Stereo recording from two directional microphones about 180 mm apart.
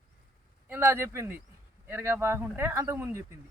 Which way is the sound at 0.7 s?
15° right (ahead or behind).